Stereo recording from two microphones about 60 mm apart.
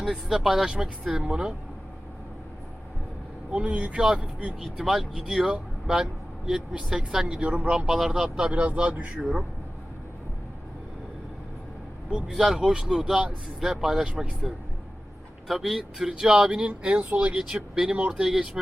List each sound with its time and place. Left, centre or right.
0.0 s speech: centre
3.5 s speech: right
4.6 s speech: centre
7.4 s speech: right
7.9 s speech: centre
12.3 s speech: centre; by 17.3 s right
17.3 s speech: centre
18.3 s speech: centre